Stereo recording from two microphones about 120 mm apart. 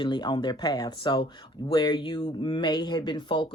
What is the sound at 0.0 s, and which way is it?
Speech, 40° left (ahead or behind).